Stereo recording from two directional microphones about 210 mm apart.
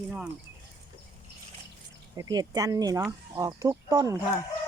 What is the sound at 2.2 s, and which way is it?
Speech, 20° right (ahead or behind).